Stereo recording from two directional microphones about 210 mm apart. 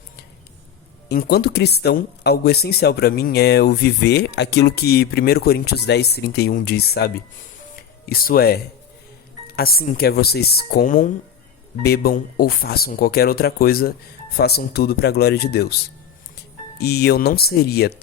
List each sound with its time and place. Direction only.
1.0 s speech: 50° left (ahead or behind)